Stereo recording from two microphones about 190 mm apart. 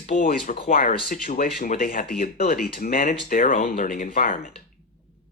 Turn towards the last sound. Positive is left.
turn(degrees=45)  # may be behind; listen again after turning